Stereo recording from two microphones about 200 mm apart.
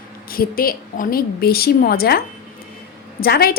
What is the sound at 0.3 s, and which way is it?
A woman's voice, 45° left (ahead or behind).